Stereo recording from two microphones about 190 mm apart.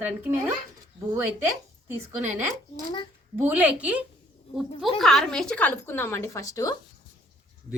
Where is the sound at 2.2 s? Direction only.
15° right (ahead or behind); by 6.7 s 15° left (ahead or behind).